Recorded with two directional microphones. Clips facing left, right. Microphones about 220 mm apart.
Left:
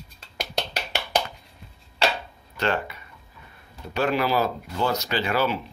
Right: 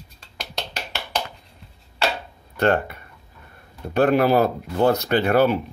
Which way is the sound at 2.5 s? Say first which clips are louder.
Right 6 dB; 55° right (ahead or behind).